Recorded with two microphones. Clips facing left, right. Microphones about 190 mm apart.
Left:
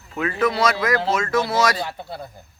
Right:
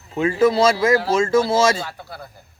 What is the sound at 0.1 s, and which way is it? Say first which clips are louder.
Speech: right 5 dB; 25° right (ahead or behind).